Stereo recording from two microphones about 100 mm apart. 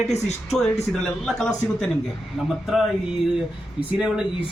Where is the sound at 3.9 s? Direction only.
10° right (ahead or behind).